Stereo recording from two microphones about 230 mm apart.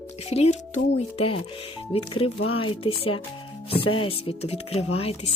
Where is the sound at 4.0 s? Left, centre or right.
Left.